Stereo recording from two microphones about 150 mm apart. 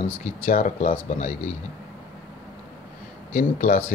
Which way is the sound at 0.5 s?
65° left (ahead or behind).